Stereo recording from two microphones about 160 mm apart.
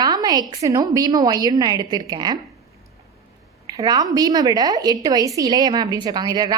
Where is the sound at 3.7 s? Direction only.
25° right (ahead or behind).